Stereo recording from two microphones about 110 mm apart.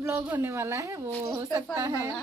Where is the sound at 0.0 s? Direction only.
25° right (ahead or behind).